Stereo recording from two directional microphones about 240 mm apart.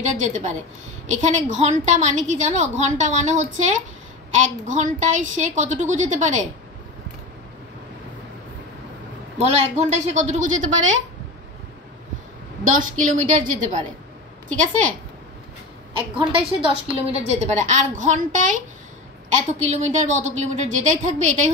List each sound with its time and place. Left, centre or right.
0.0 s a woman's voice: right
9.4 s a woman's voice: right
10.8 s speech: right
12.7 s a woman's voice: right
16.2 s a woman's voice: right